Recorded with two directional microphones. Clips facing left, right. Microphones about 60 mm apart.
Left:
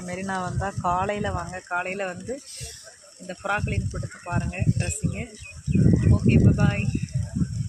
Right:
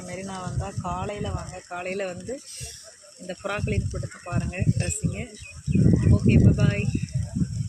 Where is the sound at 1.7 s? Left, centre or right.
Left.